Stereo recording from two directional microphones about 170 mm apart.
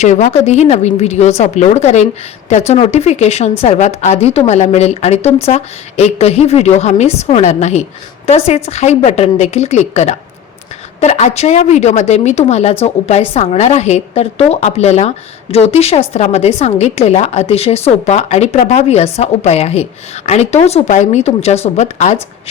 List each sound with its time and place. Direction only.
0.0 s a woman's voice: 45° left (ahead or behind)